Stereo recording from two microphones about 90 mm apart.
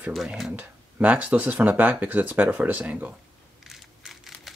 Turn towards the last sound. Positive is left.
turn(degrees=0)  # may be behind; listen again after turning